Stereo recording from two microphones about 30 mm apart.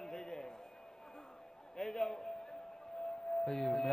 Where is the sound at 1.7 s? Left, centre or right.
Left.